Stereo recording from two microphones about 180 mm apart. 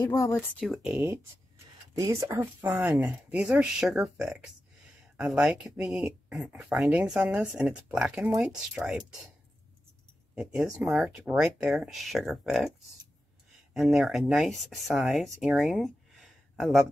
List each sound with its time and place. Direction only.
0.0 s speech: 15° left (ahead or behind)
0.6 s speech: centre (ahead or behind)
10.3 s speech: 5° right (ahead or behind)
13.7 s speech: centre (ahead or behind)
15.4 s a sound: centre (ahead or behind)